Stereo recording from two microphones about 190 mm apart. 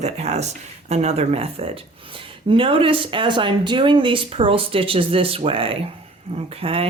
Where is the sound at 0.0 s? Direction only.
35° right (ahead or behind).